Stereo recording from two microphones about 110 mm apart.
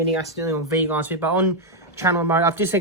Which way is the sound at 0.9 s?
15° right (ahead or behind).